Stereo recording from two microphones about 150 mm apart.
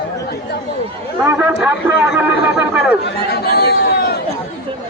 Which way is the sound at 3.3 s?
90° left.